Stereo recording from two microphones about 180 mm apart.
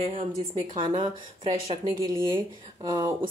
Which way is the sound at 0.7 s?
25° right (ahead or behind).